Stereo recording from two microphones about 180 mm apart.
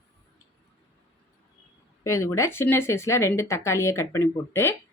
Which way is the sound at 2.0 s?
15° left (ahead or behind).